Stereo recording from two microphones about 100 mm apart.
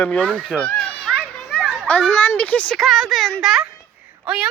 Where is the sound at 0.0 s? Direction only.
15° left (ahead or behind).